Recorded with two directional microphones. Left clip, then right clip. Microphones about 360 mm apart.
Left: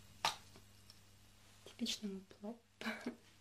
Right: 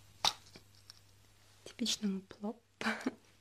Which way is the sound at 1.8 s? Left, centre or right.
Right.